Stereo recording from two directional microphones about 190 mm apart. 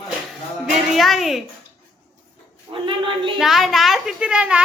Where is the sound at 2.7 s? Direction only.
25° right (ahead or behind).